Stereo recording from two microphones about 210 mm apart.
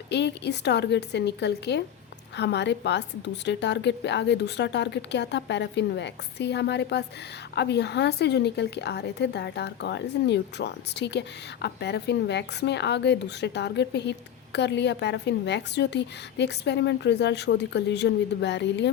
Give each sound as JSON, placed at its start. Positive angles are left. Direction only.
{"t": 0.1, "sound": "a woman's voice", "side_deg": 55}